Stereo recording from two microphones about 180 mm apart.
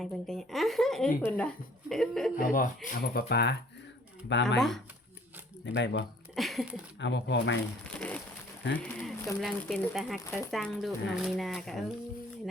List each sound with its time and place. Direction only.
0.0 s speech: centre (ahead or behind)
2.3 s speech: 50° left (ahead or behind); by 3.6 s 65° left (ahead or behind)
4.3 s speech: 80° left
5.6 s speech: 75° left (ahead or behind)
6.3 s speech: centre (ahead or behind)
7.0 s speech: 80° left
7.9 s a sound: 5° left (ahead or behind)
8.7 s speech: 5° left (ahead or behind)
10.2 s speech: 15° left (ahead or behind)
10.5 s speech: centre (ahead or behind)